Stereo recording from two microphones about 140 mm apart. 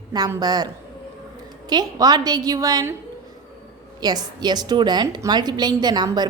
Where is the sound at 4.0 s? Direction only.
30° right (ahead or behind).